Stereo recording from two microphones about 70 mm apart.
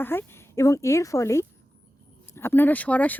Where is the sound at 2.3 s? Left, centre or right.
Left.